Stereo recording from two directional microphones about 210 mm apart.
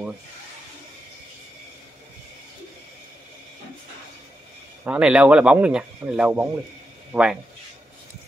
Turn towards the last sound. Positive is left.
turn(degrees=-10)  # may be behind; listen again after turning